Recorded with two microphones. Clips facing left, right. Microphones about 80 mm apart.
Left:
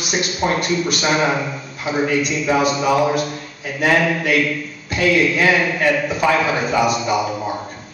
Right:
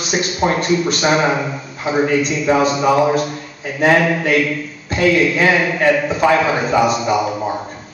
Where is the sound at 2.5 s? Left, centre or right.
Centre.